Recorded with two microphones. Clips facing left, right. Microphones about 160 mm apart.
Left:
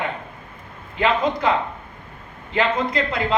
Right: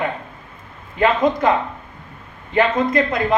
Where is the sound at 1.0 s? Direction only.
20° right (ahead or behind).